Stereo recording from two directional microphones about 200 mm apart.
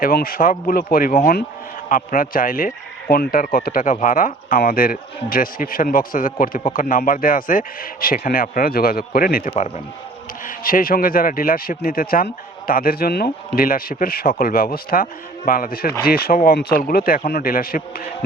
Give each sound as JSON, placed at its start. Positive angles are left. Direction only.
{"t": 0.0, "sound": "speech", "side_deg": 45}
{"t": 9.5, "sound": "speech", "side_deg": 30}
{"t": 10.4, "sound": "speech", "side_deg": 45}